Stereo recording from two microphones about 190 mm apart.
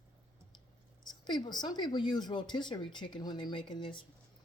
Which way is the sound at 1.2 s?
25° left (ahead or behind).